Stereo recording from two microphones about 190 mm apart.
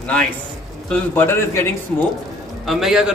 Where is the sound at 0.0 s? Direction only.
5° left (ahead or behind).